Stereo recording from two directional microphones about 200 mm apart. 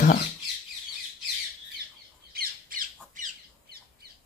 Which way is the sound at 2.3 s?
45° right (ahead or behind).